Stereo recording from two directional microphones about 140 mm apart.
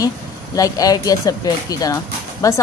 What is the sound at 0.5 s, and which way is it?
A woman's voice, 25° left (ahead or behind).